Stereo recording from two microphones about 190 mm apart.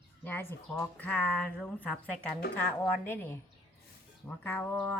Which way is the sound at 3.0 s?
10° left (ahead or behind).